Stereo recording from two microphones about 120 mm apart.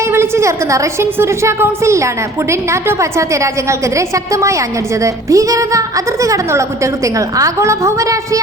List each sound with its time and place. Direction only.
0.1 s a woman's voice: 25° right (ahead or behind)